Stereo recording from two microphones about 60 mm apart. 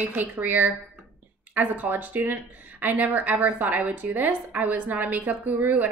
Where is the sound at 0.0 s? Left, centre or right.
Right.